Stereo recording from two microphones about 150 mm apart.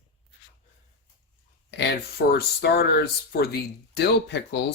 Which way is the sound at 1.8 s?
90° left.